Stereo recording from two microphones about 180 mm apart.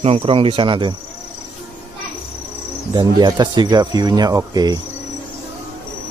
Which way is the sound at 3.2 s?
25° right (ahead or behind).